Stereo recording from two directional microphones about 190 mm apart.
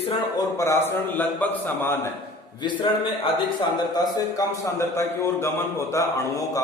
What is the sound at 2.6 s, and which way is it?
A man's voice, 25° left (ahead or behind).